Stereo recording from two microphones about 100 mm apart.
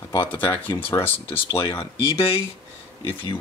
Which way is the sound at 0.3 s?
20° left (ahead or behind).